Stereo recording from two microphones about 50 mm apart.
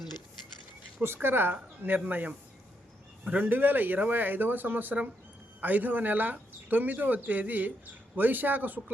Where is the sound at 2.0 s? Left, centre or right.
Right.